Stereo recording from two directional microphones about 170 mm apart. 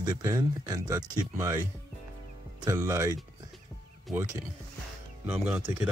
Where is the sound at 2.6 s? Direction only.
20° right (ahead or behind).